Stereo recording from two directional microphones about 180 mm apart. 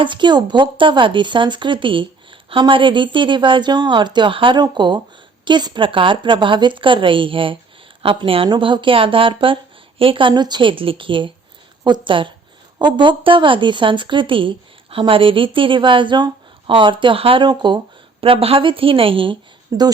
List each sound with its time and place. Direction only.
0.0 s speech: 25° right (ahead or behind)